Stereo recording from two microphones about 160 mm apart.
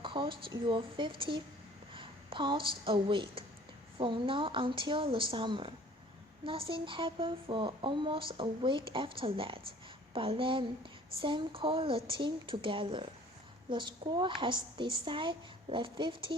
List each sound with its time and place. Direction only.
0.0 s a woman's voice: 30° right (ahead or behind)